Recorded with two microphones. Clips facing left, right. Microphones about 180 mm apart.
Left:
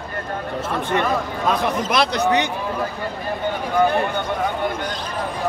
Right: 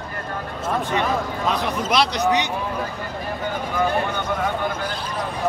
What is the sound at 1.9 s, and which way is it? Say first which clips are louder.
Speech: right 1 dB; 50° left (ahead or behind).